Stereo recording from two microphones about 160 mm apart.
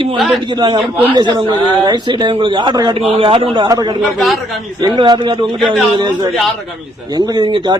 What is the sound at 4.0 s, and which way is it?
Speech, centre (ahead or behind).